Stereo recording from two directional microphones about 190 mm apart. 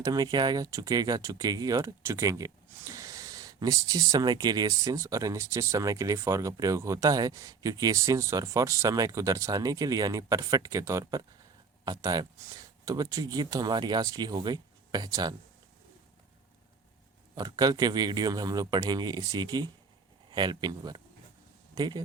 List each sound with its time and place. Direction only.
0.0 s speech: 20° right (ahead or behind)
17.3 s speech: 20° right (ahead or behind)